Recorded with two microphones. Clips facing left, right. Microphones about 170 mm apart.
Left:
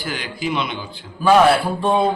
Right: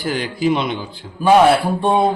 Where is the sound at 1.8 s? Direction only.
25° right (ahead or behind).